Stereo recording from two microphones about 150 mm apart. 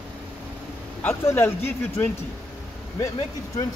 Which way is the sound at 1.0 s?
15° left (ahead or behind).